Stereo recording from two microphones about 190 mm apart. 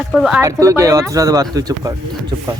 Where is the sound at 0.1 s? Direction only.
Centre (ahead or behind).